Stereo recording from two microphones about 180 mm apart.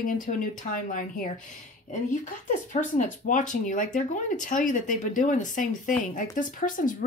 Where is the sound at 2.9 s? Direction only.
45° left (ahead or behind).